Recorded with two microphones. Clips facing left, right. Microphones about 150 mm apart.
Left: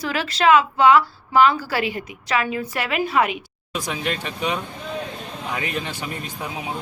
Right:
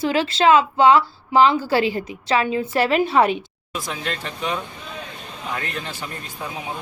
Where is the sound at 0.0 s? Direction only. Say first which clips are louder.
Right 3 dB; 25° right (ahead or behind).